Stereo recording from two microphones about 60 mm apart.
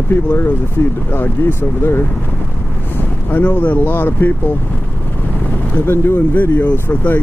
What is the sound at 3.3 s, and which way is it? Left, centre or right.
Speech, left.